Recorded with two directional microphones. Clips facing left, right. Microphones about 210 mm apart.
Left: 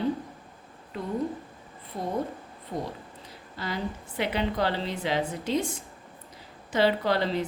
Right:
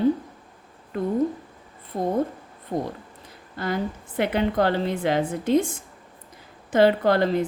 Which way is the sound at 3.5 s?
50° right (ahead or behind).